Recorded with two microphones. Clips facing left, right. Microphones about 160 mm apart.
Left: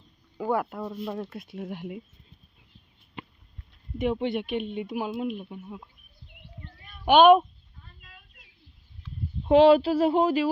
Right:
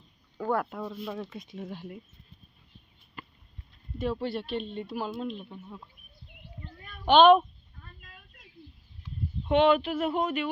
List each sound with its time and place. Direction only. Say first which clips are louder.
0.3 s speech: left 2 dB; 10° left (ahead or behind)
3.9 s speech: left 4 dB; 20° left (ahead or behind)
7.0 s a child's voice: left 2 dB; 10° left (ahead or behind)
9.4 s speech: left 6 dB; 30° left (ahead or behind)